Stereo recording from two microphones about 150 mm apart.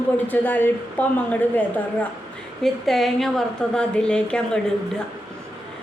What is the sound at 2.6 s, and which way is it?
A woman's voice, centre (ahead or behind).